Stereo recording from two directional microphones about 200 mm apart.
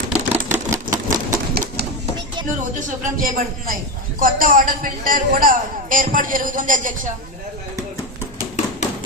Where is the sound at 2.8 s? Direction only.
45° right (ahead or behind).